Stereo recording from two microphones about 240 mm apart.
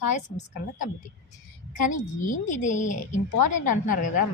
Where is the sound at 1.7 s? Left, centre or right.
Left.